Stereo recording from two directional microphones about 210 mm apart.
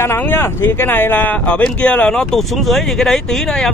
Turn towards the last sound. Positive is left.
turn(degrees=5)  # may be behind; listen again after turning